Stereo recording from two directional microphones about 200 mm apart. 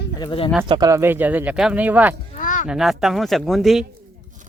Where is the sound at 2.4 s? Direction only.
40° left (ahead or behind).